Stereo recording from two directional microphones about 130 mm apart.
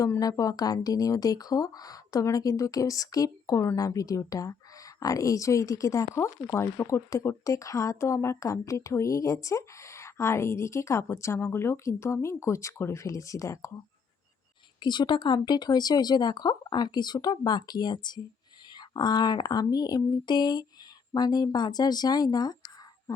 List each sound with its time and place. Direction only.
0.0 s speech: 25° left (ahead or behind)
14.8 s speech: 35° left (ahead or behind)
23.1 s a sound: 25° left (ahead or behind)